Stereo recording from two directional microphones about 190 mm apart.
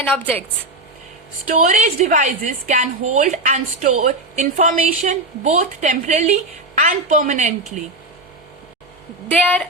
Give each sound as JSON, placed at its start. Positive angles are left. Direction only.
{"t": 0.0, "sound": "a woman's voice", "side_deg": 10}
{"t": 1.5, "sound": "a woman's voice", "side_deg": -40}
{"t": 9.3, "sound": "a woman's voice", "side_deg": 10}